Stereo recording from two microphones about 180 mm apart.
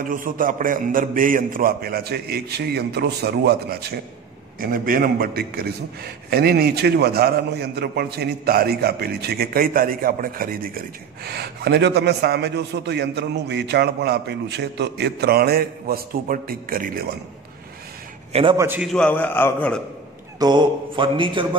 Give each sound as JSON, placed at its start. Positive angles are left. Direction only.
{"t": 0.0, "sound": "a man's voice", "side_deg": -50}
{"t": 18.3, "sound": "a man's voice", "side_deg": -30}
{"t": 18.6, "sound": "a man's voice", "side_deg": -10}
{"t": 18.9, "sound": "a man's voice", "side_deg": 5}
{"t": 20.3, "sound": "a man's voice", "side_deg": -25}